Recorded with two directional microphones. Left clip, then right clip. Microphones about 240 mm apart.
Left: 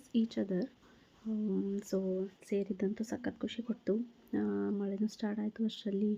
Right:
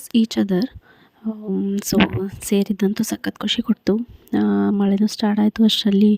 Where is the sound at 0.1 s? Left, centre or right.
Right.